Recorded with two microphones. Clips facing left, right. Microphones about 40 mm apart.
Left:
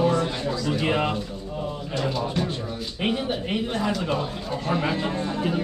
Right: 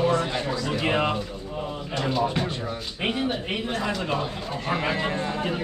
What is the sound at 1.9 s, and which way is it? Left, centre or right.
Speech, right.